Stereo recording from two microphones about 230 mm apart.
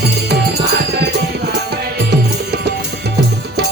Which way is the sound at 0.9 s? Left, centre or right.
Right.